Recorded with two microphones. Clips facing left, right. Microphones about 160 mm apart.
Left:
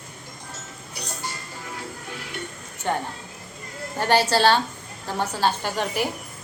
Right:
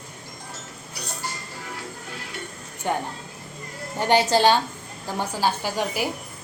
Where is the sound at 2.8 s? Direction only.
15° right (ahead or behind).